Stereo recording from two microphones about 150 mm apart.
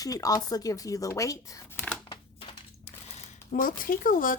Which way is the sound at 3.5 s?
65° left (ahead or behind).